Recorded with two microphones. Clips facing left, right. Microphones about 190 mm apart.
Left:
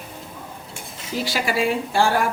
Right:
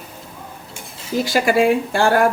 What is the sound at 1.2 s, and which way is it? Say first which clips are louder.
Speech: right 7 dB; 50° right (ahead or behind).